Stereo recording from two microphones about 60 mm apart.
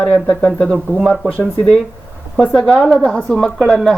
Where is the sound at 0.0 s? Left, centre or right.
Left.